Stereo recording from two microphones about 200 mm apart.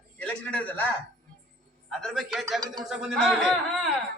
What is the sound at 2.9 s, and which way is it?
Speech, centre (ahead or behind).